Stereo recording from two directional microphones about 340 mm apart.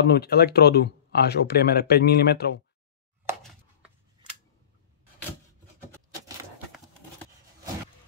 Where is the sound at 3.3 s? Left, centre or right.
Centre.